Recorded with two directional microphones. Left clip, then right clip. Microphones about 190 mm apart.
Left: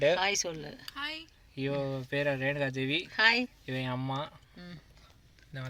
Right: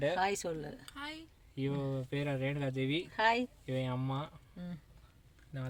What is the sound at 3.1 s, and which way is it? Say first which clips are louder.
Speech: left 5 dB; 20° right (ahead or behind).